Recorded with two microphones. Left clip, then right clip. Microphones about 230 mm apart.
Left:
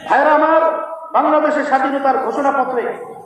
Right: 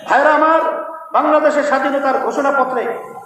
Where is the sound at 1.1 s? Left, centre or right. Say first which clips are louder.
Right 1 dB; right.